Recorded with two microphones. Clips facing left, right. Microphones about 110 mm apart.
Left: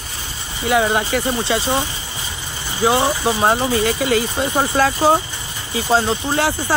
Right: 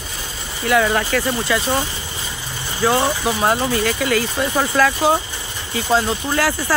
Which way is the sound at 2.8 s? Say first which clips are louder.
Left 1 dB; 15° left (ahead or behind).